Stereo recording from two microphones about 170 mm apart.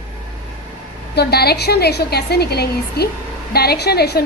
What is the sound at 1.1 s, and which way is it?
A woman's voice, 70° left (ahead or behind).